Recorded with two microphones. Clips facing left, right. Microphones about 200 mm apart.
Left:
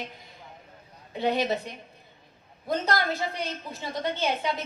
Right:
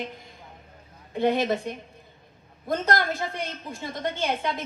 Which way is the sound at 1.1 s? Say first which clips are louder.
Right 3 dB; 50° right (ahead or behind).